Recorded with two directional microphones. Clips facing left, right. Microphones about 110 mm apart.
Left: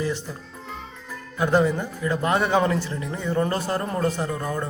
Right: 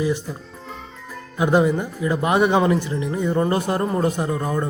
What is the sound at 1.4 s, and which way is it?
A man's voice, 15° right (ahead or behind).